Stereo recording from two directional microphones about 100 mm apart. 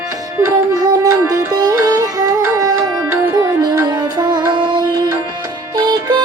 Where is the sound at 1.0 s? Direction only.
30° right (ahead or behind); by 4.9 s 45° right (ahead or behind).